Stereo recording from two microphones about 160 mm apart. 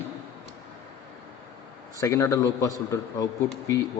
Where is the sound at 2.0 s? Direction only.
15° left (ahead or behind).